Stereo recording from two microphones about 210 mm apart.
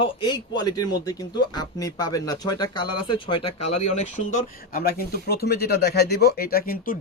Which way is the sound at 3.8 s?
35° left (ahead or behind).